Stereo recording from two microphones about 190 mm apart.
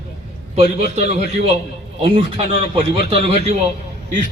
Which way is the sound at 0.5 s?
35° right (ahead or behind).